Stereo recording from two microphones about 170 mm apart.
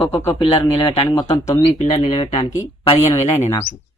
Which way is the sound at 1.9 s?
35° left (ahead or behind).